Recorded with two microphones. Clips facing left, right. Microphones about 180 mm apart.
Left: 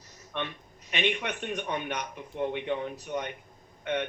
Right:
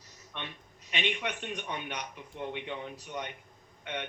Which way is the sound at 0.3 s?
50° left (ahead or behind).